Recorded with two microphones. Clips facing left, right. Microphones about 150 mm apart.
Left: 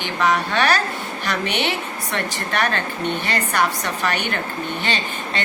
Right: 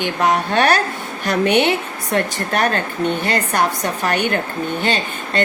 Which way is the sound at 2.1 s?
40° right (ahead or behind).